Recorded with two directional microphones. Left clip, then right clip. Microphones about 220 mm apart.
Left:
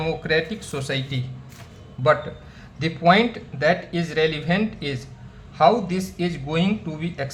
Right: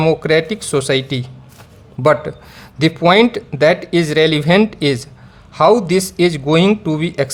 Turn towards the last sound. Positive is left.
turn(degrees=-50)  # may be behind; listen again after turning